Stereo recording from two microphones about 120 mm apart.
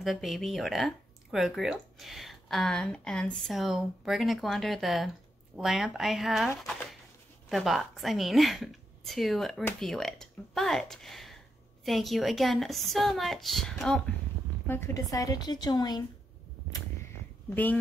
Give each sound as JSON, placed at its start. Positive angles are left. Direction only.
{"t": 0.0, "sound": "a woman's voice", "side_deg": 0}
{"t": 6.6, "sound": "a sound", "side_deg": 0}
{"t": 7.4, "sound": "a woman's voice", "side_deg": 0}
{"t": 14.7, "sound": "a woman's voice", "side_deg": 25}